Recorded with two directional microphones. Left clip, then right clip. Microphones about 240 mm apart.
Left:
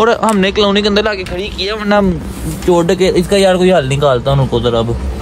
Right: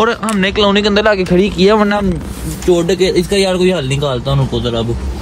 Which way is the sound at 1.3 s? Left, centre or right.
Right.